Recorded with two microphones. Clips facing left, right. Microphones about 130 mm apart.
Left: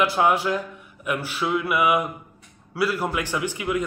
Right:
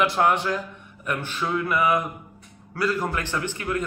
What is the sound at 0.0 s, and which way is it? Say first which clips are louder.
A man's voice: left 1 dB; 5° left (ahead or behind).